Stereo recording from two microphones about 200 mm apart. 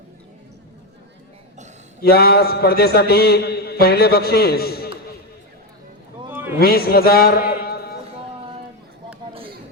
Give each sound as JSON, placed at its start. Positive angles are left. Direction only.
{"t": 2.0, "sound": "a man's voice", "side_deg": 50}
{"t": 6.3, "sound": "a sound", "side_deg": -10}
{"t": 6.6, "sound": "a man's voice", "side_deg": 50}